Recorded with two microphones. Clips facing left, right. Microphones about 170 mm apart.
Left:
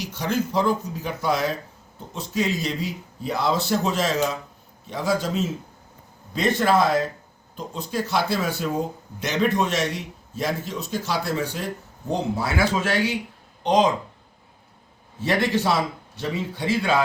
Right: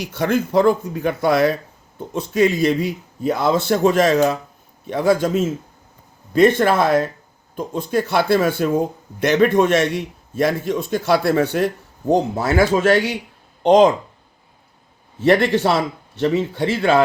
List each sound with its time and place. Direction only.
0.0 s a man's voice: 55° right (ahead or behind)
15.2 s a man's voice: 55° right (ahead or behind)